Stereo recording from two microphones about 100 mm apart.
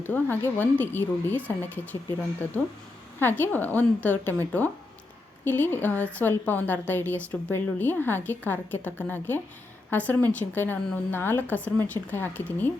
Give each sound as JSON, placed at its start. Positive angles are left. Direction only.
{"t": 0.0, "sound": "a woman's voice", "side_deg": 20}
{"t": 5.5, "sound": "a woman's voice", "side_deg": 20}